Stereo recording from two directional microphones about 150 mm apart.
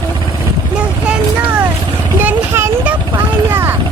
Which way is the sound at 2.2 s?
10° right (ahead or behind).